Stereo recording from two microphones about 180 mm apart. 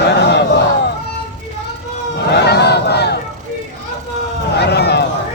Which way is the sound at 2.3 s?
70° left (ahead or behind).